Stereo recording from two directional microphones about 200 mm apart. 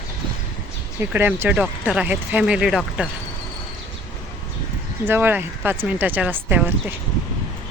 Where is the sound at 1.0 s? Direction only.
10° right (ahead or behind).